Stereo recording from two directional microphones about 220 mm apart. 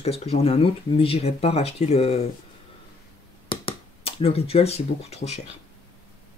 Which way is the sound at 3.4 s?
25° left (ahead or behind).